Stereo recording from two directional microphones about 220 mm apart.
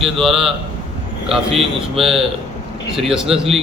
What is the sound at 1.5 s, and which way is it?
A man's voice, centre (ahead or behind).